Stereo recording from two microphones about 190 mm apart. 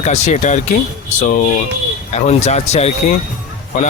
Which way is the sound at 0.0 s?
35° left (ahead or behind).